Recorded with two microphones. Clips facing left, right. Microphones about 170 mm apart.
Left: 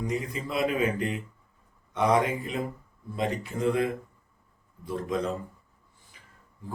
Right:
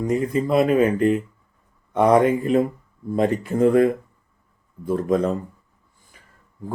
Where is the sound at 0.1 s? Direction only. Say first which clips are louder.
Right 11 dB; 50° right (ahead or behind).